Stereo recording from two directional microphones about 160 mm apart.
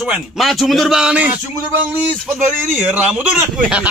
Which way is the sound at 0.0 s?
Centre (ahead or behind).